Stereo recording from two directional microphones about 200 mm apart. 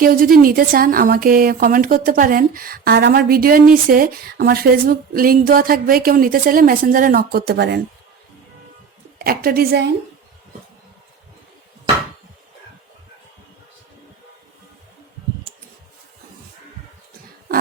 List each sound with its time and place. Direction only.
0.0 s speech: 45° right (ahead or behind)
9.1 s speech: 50° right (ahead or behind)